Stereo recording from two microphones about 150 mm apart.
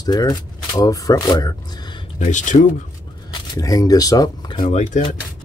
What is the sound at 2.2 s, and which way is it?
Speech, 55° left (ahead or behind).